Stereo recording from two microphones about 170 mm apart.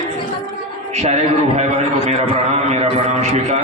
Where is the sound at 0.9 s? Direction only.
40° right (ahead or behind).